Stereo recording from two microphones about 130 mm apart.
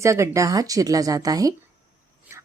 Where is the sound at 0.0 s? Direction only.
25° right (ahead or behind).